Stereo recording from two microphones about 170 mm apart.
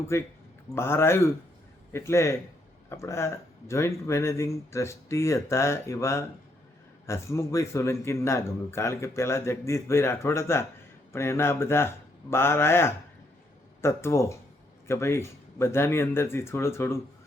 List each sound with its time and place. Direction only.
0.1 s speech: 15° left (ahead or behind)